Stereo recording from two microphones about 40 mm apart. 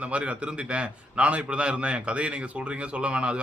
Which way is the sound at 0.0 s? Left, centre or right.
Right.